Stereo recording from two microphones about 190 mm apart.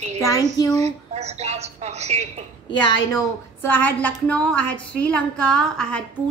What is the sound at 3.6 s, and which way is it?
A woman's voice, 10° left (ahead or behind).